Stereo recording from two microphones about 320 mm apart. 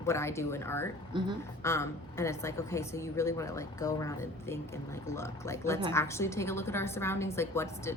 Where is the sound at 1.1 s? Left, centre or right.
Centre.